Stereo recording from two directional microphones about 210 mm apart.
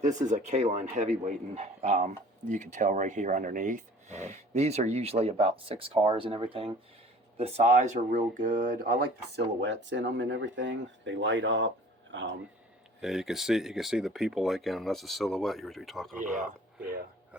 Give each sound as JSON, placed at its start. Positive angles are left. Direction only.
{"t": 0.2, "sound": "speech", "side_deg": -35}
{"t": 13.0, "sound": "speech", "side_deg": 0}